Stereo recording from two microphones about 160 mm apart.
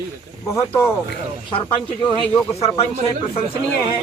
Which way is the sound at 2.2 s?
10° left (ahead or behind).